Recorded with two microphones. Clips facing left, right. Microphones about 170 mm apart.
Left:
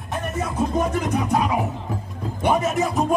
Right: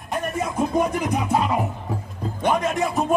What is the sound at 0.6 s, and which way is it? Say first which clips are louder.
Music: right 1 dB; 10° right (ahead or behind).